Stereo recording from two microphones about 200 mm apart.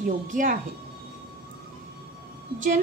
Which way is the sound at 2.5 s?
40° right (ahead or behind).